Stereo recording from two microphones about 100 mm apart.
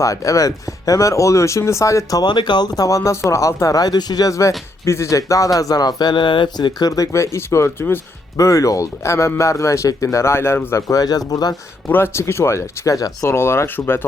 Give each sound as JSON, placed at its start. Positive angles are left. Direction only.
{"t": 0.0, "sound": "speech", "side_deg": 35}
{"t": 10.8, "sound": "speech", "side_deg": 40}
{"t": 11.9, "sound": "speech", "side_deg": 20}
{"t": 13.3, "sound": "speech", "side_deg": 25}